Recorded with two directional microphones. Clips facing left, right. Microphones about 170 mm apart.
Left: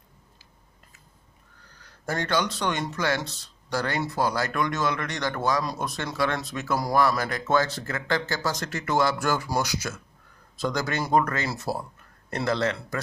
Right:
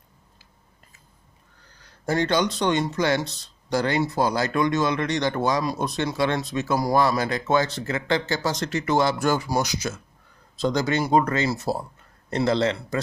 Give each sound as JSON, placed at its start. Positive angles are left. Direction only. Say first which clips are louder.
{"t": 2.0, "sound": "speech", "louder": "right 4 dB", "side_deg": -20}